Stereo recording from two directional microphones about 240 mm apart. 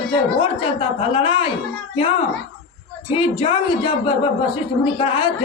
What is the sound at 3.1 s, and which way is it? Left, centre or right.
Speech, left.